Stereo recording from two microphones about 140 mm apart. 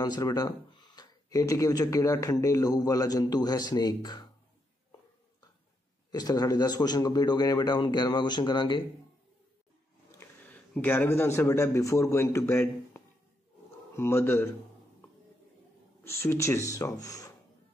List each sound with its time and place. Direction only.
0.0 s speech: 30° left (ahead or behind)
6.1 s speech: 25° left (ahead or behind)
10.1 s a man's voice: 10° left (ahead or behind)
16.0 s speech: 20° left (ahead or behind)